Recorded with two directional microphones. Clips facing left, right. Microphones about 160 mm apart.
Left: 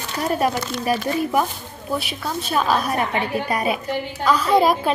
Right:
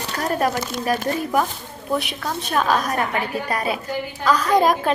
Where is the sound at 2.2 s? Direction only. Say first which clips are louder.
Even; 5° left (ahead or behind).